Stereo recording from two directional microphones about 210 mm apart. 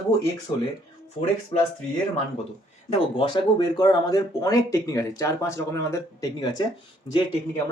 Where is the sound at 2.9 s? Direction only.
25° left (ahead or behind).